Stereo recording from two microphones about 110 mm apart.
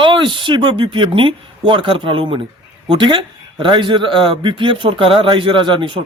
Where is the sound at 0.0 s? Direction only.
45° right (ahead or behind).